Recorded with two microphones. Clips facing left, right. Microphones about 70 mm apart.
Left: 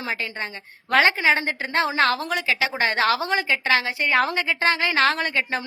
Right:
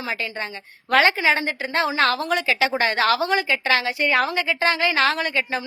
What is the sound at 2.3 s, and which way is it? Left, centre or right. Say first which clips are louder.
Speech: right 3 dB; centre.